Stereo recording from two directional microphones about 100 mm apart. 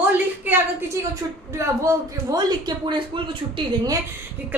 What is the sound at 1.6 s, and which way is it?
A man's voice, 35° right (ahead or behind).